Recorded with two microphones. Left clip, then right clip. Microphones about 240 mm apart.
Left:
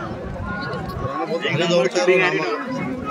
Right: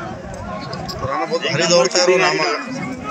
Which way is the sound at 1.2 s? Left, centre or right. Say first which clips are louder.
Right 3 dB; right.